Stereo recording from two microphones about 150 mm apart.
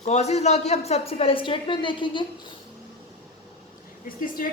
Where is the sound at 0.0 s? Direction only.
45° left (ahead or behind).